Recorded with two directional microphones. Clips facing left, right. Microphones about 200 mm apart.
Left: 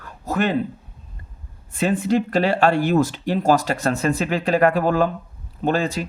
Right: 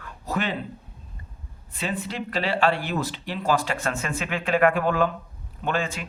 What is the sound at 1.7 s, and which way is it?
Speech, 50° left (ahead or behind).